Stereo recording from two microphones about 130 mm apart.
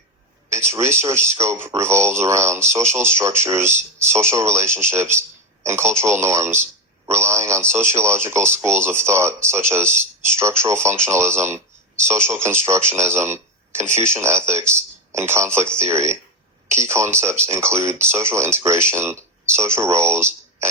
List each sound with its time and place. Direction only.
0.5 s speech: 20° right (ahead or behind)